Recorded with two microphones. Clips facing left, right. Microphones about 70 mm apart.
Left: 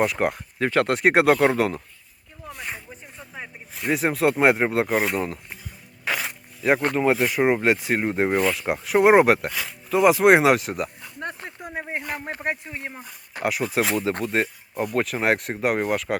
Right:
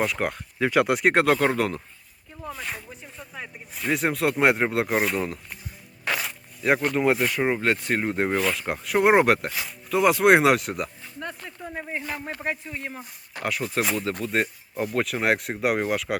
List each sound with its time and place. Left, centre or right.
0.0 s speech: centre
0.7 s speech: centre
6.9 s speech: centre
11.2 s a sound: left
11.6 s speech: left
13.4 s speech: centre